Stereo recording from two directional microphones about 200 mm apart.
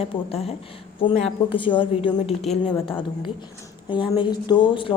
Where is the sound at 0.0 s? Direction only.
30° left (ahead or behind).